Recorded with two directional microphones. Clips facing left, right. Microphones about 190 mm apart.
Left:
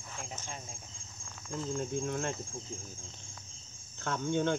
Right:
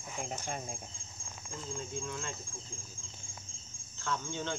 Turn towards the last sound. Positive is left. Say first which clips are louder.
# left 6 dB
turn(degrees=55)  # may be behind; listen again after turning